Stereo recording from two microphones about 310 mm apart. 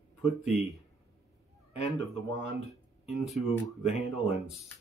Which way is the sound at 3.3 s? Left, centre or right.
Centre.